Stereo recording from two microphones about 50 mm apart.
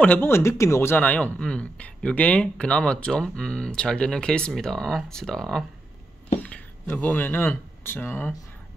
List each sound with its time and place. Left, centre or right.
0.2 s speech: left
0.9 s speech: left; by 5.7 s centre
6.4 s speech: left